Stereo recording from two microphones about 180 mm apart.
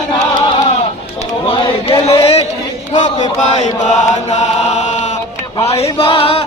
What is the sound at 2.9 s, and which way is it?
Chant, 40° left (ahead or behind).